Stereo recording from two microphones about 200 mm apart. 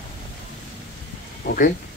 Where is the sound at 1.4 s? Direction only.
45° left (ahead or behind).